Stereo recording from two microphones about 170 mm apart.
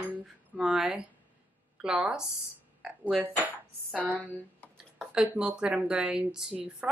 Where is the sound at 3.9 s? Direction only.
10° left (ahead or behind).